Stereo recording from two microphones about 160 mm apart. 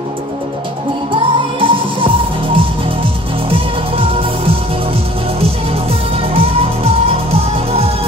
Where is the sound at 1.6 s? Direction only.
35° right (ahead or behind).